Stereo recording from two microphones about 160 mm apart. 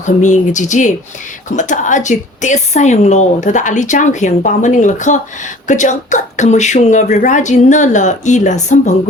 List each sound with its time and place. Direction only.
0.0 s a woman's voice: 50° left (ahead or behind)